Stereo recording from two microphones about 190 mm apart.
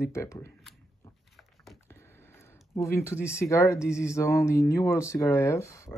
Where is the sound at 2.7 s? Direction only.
15° left (ahead or behind).